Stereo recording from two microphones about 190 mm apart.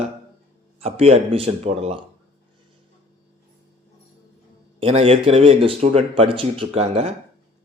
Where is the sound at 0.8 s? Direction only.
30° right (ahead or behind).